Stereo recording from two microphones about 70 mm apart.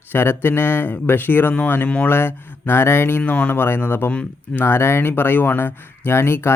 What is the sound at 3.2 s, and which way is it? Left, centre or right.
Speech, left.